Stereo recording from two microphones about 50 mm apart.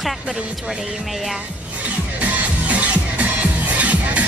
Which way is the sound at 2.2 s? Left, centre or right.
Right.